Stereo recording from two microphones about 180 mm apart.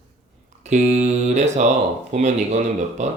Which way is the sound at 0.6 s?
40° right (ahead or behind).